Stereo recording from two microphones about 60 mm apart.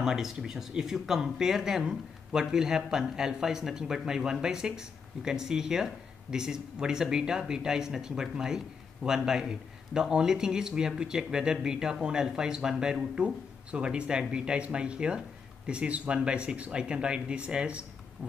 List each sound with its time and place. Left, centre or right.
0.0 s speech: centre